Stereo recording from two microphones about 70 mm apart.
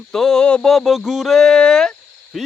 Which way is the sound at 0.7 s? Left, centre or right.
Centre.